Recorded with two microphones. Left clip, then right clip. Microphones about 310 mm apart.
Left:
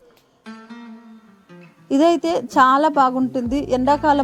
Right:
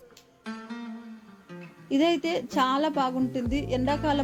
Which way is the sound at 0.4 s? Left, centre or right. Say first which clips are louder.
Even; centre.